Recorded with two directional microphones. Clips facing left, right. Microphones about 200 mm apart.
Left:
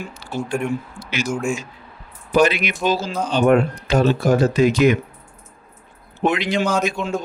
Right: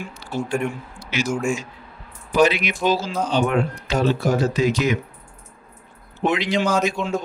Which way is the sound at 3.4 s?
55° left (ahead or behind).